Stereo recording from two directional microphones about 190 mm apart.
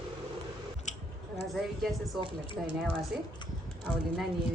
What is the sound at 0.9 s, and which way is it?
Chewing, 40° left (ahead or behind).